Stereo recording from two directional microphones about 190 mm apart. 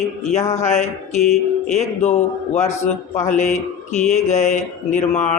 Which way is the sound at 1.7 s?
35° left (ahead or behind).